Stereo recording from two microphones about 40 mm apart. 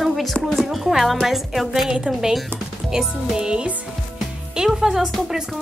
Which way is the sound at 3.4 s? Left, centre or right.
Centre.